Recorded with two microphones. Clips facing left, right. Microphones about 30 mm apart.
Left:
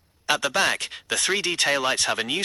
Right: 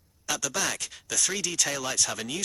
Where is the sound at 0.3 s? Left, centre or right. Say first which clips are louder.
Left 8 dB; left.